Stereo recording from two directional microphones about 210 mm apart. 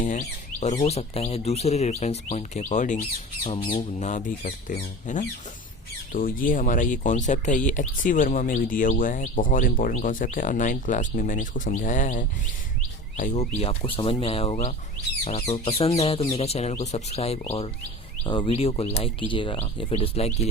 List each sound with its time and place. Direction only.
0.0 s speech: 35° left (ahead or behind)